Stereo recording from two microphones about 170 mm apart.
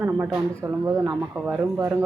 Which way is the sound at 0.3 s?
15° right (ahead or behind).